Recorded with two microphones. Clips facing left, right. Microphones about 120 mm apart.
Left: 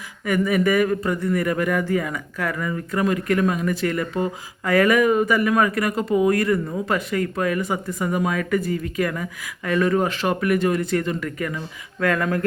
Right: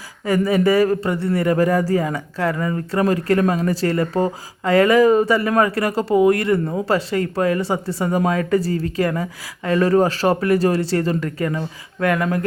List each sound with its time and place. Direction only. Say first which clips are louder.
0.3 s a man's voice: right 3 dB; 30° right (ahead or behind)